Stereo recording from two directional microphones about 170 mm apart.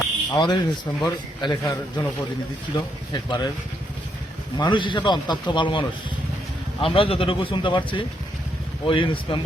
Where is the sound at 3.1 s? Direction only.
25° left (ahead or behind).